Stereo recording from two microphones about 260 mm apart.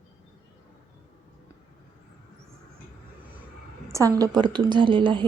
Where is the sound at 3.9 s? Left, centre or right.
Centre.